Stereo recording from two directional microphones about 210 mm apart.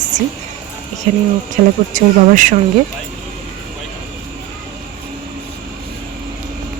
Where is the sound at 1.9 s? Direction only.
40° right (ahead or behind).